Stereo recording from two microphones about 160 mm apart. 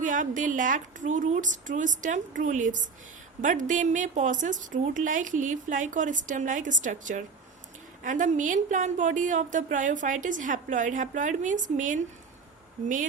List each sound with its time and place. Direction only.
0.0 s a woman's voice: 55° right (ahead or behind)